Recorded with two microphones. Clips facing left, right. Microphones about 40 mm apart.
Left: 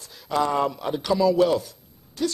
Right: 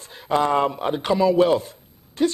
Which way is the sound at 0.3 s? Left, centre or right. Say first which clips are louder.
Right 3 dB; right.